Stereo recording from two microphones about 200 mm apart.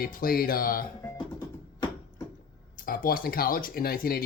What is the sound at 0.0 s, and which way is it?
Speech, 45° left (ahead or behind).